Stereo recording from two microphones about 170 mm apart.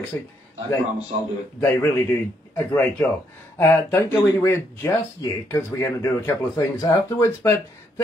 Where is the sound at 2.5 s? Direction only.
10° left (ahead or behind).